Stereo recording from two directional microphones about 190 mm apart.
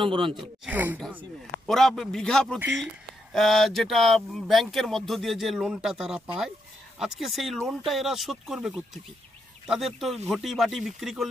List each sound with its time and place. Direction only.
0.0 s speech: 25° right (ahead or behind)
0.4 s speech: 10° right (ahead or behind)
1.7 s speech: centre (ahead or behind)